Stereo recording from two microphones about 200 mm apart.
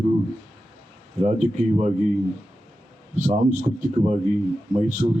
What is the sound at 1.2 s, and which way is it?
Speech, 35° right (ahead or behind).